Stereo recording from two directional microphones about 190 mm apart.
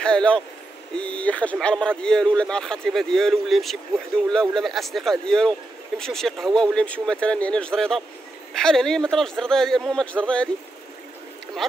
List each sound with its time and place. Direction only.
0.0 s speech: 5° left (ahead or behind)